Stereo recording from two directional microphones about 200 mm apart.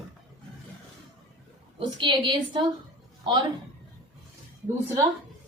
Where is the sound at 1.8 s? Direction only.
25° right (ahead or behind).